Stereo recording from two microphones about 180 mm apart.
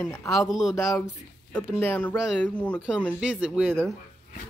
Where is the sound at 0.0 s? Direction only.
15° left (ahead or behind).